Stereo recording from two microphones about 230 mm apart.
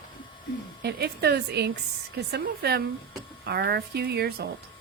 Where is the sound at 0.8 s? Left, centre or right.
Right.